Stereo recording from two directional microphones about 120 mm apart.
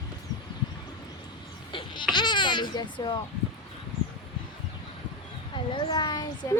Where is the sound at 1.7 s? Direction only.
40° left (ahead or behind).